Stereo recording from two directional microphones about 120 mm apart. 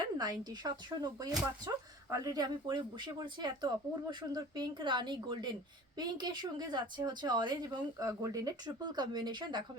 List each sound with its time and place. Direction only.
0.0 s speech: 35° right (ahead or behind)